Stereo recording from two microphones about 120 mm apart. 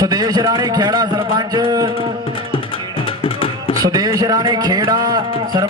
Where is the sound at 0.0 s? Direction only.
35° right (ahead or behind).